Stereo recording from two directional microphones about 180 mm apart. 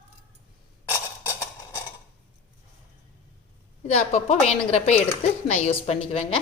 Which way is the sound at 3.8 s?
35° left (ahead or behind).